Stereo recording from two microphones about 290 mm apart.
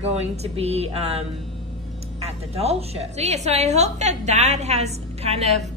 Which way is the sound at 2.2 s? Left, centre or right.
Right.